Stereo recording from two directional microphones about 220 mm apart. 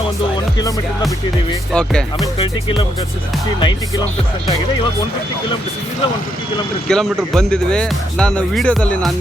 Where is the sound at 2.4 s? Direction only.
25° left (ahead or behind).